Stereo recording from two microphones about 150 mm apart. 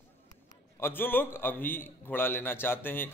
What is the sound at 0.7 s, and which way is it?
Speech, 15° left (ahead or behind).